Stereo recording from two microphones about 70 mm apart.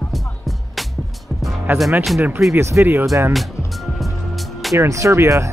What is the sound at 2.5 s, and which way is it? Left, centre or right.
Speech, right.